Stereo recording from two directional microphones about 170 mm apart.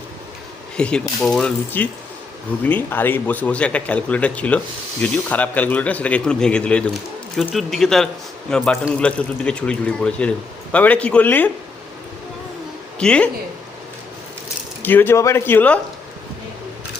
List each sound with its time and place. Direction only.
0.8 s speech: 5° left (ahead or behind)
13.0 s speech: 5° left (ahead or behind)
14.8 s speech: 10° left (ahead or behind)